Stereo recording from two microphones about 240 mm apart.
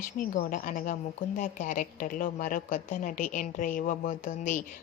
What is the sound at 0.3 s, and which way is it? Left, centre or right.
A woman's voice, left.